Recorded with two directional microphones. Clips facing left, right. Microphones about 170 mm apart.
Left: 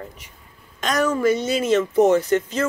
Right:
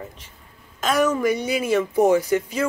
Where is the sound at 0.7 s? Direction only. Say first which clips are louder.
Right 2 dB; 5° right (ahead or behind).